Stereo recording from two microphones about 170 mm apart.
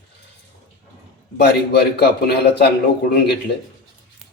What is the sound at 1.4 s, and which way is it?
Speech, 70° left (ahead or behind).